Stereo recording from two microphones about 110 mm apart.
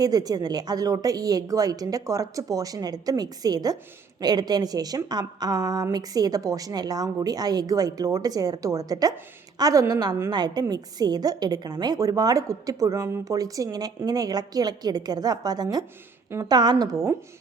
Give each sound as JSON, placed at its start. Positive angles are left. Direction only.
{"t": 0.0, "sound": "a woman's voice", "side_deg": -35}